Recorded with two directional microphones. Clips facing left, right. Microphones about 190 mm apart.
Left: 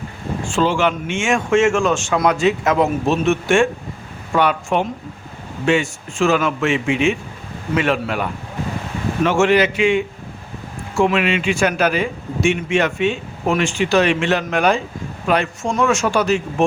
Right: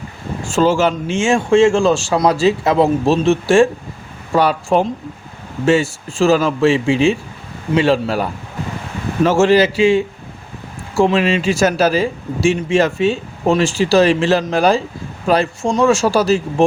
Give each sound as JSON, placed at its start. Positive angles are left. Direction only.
{"t": 0.4, "sound": "a man's voice", "side_deg": -40}